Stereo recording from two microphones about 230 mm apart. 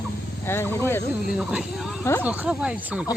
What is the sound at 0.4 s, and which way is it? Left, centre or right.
Speech, centre.